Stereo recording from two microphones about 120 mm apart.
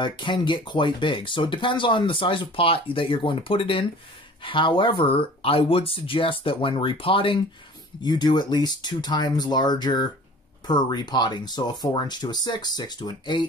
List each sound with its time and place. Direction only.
0.0 s speech: 40° left (ahead or behind)
8.0 s speech: 35° left (ahead or behind)